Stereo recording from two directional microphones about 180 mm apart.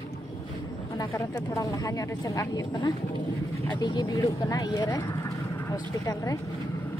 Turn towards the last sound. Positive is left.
turn(degrees=15)  # may be behind; listen again after turning